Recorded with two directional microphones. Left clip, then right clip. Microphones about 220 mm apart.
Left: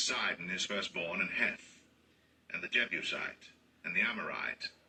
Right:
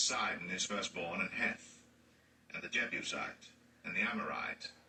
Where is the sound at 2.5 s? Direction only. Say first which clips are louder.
Left 4 dB; 45° left (ahead or behind).